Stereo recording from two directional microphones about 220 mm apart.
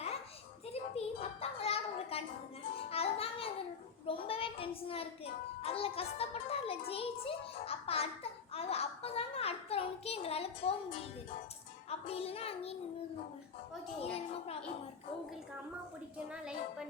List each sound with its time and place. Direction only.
0.7 s a sound: 25° left (ahead or behind)
2.9 s music: 25° left (ahead or behind)
4.0 s a child's voice: 25° left (ahead or behind)
11.9 s child singing: 25° left (ahead or behind)
14.0 s a child's voice: 25° left (ahead or behind)
16.1 s a woman's voice: 5° right (ahead or behind)